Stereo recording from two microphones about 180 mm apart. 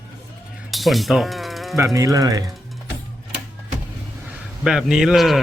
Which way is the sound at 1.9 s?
20° right (ahead or behind).